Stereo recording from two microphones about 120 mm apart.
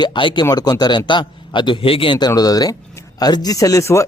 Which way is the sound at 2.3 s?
30° left (ahead or behind).